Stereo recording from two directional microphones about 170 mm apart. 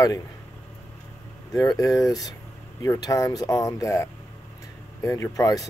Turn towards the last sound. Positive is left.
turn(degrees=20)  # may be behind; listen again after turning